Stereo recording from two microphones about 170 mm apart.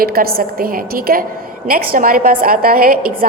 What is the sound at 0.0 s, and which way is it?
A woman's voice, 60° right (ahead or behind).